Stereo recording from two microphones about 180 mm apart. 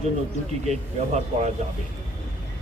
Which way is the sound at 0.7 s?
40° right (ahead or behind).